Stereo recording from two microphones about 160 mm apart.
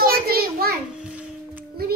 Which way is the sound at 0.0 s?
75° right (ahead or behind).